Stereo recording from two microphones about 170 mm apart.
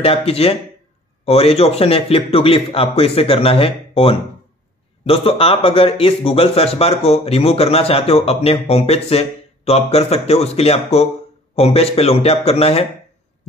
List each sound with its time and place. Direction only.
0.0 s a man's voice: 35° left (ahead or behind)